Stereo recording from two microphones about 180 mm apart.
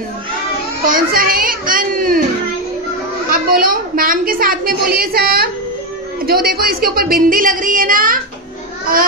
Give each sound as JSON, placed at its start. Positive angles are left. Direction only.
{"t": 0.8, "sound": "a woman's voice", "side_deg": -55}
{"t": 3.3, "sound": "a woman's voice", "side_deg": -55}